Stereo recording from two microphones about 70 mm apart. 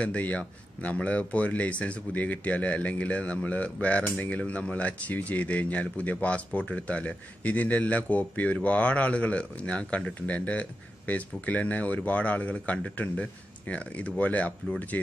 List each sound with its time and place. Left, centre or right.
0.0 s speech: centre